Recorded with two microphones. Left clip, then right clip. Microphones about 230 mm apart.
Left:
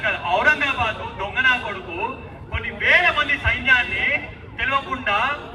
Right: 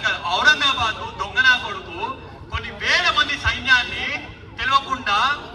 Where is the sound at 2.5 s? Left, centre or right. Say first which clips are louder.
Left 3 dB; centre.